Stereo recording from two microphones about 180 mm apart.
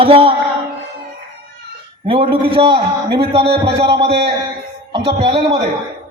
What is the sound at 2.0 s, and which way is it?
A man's voice, 30° right (ahead or behind).